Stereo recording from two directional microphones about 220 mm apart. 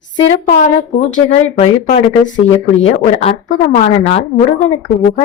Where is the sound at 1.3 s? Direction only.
30° left (ahead or behind).